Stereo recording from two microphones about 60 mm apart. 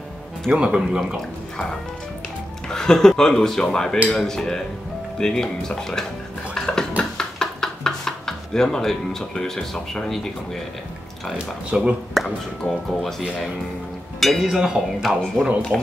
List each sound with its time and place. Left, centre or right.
0.5 s speech: centre
1.1 s speech: centre
6.5 s dishes: centre
7.0 s a sound: centre
11.7 s speech: centre
12.1 s speech: centre
14.4 s speech: centre
15.0 s speech: centre